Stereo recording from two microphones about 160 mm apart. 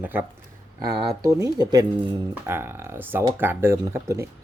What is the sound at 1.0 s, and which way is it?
Speech, 25° right (ahead or behind).